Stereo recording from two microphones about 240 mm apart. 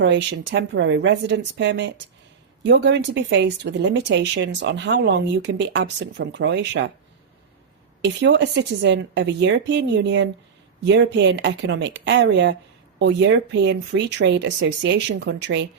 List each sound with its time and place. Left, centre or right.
0.0 s speech: right
8.0 s speech: right